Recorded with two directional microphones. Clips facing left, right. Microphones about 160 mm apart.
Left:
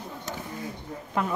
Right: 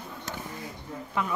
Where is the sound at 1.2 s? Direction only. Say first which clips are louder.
Left 3 dB; 45° left (ahead or behind).